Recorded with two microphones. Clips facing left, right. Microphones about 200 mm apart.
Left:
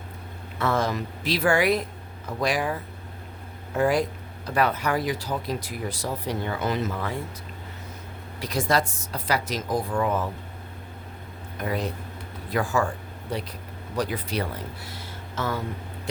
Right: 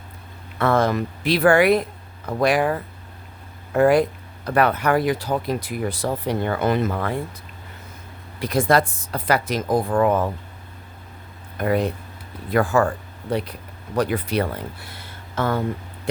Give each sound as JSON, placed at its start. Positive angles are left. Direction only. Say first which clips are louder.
{"t": 0.6, "sound": "speech", "louder": "right 6 dB", "side_deg": -60}
{"t": 8.4, "sound": "speech", "louder": "right 6 dB", "side_deg": -55}
{"t": 11.5, "sound": "speech", "louder": "right 7 dB", "side_deg": -60}
{"t": 13.9, "sound": "speech", "louder": "right 6 dB", "side_deg": -60}